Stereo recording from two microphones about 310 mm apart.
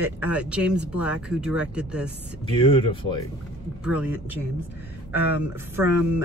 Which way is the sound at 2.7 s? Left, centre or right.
Centre.